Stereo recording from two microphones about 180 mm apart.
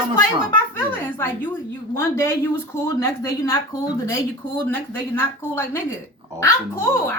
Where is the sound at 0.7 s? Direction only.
10° left (ahead or behind).